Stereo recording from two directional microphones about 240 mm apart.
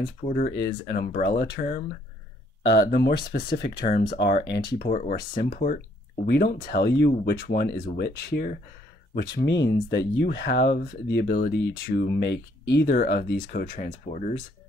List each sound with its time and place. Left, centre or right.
0.2 s speech: left